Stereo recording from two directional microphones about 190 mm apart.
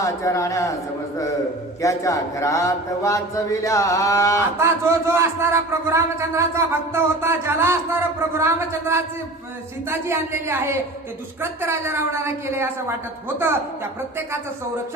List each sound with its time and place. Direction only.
0.0 s a man's voice: 15° left (ahead or behind)
1.8 s a man's voice: 15° left (ahead or behind)
4.5 s a man's voice: 15° right (ahead or behind)